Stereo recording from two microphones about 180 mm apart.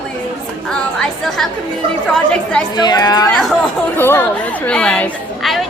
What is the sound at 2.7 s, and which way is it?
Speech, 25° left (ahead or behind).